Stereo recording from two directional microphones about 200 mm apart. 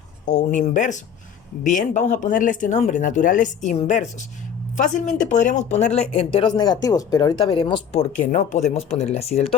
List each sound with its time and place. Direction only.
0.3 s speech: 35° left (ahead or behind)
8.2 s speech: 35° left (ahead or behind)